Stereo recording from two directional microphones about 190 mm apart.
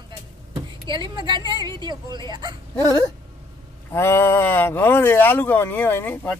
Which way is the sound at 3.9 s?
15° left (ahead or behind).